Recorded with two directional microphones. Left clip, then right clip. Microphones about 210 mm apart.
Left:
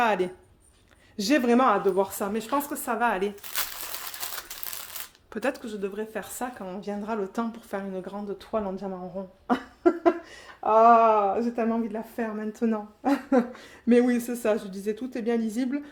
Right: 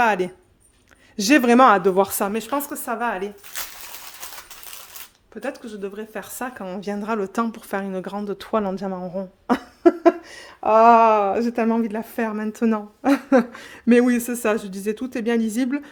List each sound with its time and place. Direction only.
0.0 s a woman's voice: 30° right (ahead or behind); by 2.3 s 50° right (ahead or behind)
2.3 s a woman's voice: 30° right (ahead or behind); by 3.2 s 10° right (ahead or behind)
5.3 s speech: 25° left (ahead or behind)
5.6 s speech: 10° right (ahead or behind)
6.4 s a woman's voice: 40° right (ahead or behind)